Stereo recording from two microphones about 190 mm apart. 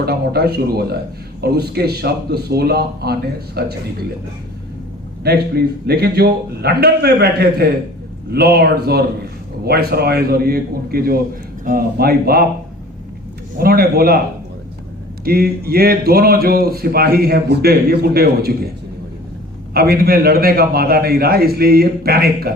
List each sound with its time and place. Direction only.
0.0 s a man's voice: 55° right (ahead or behind)
5.2 s a man's voice: 55° right (ahead or behind)
13.6 s speech: 55° right (ahead or behind)
15.2 s speech: 50° right (ahead or behind)
19.7 s speech: 55° right (ahead or behind)